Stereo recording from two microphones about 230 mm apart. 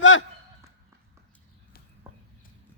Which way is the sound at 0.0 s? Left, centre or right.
Left.